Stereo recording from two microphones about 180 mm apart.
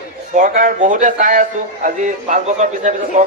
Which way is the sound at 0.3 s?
45° right (ahead or behind).